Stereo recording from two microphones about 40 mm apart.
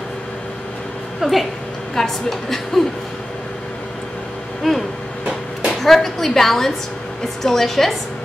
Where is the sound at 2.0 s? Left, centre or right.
Centre.